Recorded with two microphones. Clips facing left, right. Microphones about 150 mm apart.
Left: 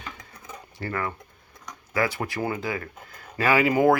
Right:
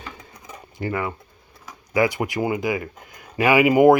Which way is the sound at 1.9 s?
20° right (ahead or behind).